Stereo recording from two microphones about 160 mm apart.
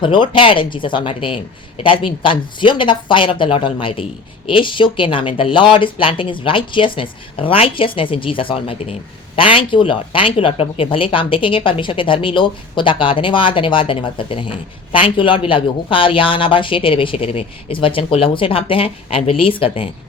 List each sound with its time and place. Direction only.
0.0 s speech: 30° left (ahead or behind)